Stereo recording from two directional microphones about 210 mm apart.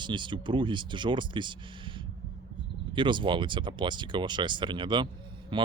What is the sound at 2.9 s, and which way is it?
Speech, 20° right (ahead or behind).